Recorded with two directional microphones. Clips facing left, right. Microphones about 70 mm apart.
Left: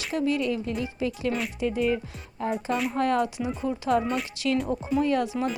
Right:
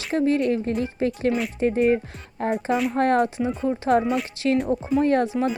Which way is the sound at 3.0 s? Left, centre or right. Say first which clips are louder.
Right 5 dB; right.